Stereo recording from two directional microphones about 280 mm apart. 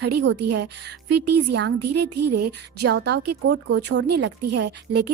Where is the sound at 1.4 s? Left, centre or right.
Right.